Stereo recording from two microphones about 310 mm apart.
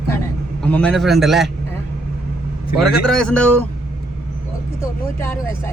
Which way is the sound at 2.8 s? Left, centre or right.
Centre.